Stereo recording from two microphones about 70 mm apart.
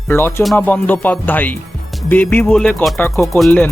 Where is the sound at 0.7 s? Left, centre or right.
Left.